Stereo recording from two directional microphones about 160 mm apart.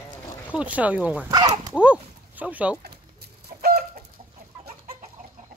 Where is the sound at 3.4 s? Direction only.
75° right (ahead or behind).